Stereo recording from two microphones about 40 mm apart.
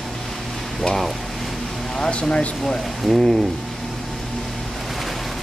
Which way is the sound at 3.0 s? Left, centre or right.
Centre.